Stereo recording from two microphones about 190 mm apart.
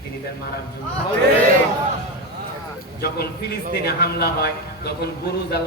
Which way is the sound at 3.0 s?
55° left (ahead or behind).